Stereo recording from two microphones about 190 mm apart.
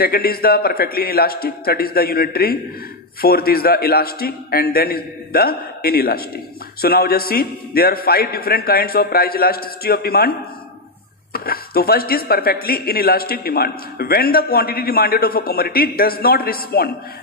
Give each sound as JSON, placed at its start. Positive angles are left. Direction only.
{"t": 0.0, "sound": "a man's voice", "side_deg": 55}
{"t": 11.3, "sound": "a man's voice", "side_deg": 50}